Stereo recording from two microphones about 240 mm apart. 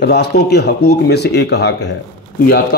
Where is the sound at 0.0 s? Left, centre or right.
Left.